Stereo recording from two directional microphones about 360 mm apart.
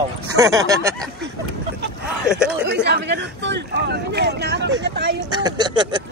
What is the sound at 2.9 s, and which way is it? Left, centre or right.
Speech, right.